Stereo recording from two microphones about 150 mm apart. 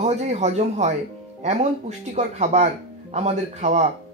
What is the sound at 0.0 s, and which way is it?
A woman's voice, 50° right (ahead or behind).